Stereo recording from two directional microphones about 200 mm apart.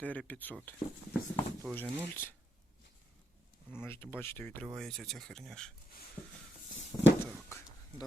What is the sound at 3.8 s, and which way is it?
Speech, 10° left (ahead or behind).